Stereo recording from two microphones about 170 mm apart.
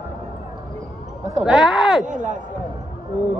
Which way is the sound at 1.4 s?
5° right (ahead or behind).